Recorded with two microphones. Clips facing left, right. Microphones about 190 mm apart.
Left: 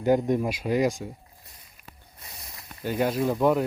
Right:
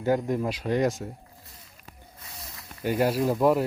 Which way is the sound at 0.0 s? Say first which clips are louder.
Left 3 dB; 20° left (ahead or behind).